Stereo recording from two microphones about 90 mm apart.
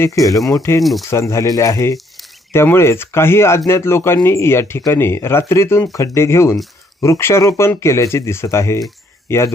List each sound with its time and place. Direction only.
0.0 s speech: 40° left (ahead or behind)
0.8 s speech: centre (ahead or behind)
1.1 s speech: 35° left (ahead or behind)